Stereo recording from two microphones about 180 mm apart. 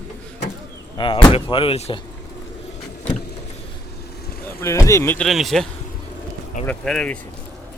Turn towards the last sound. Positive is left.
turn(degrees=5)  # may be behind; listen again after turning